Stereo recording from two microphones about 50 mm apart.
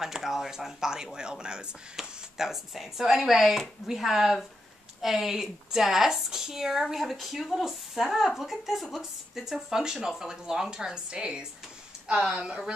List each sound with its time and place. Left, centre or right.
0.0 s speech: centre